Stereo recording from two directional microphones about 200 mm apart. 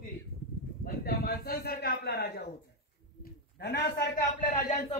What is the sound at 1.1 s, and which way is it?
A man's voice, 50° left (ahead or behind).